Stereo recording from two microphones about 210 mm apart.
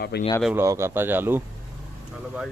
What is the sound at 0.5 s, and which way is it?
Speech, 15° right (ahead or behind).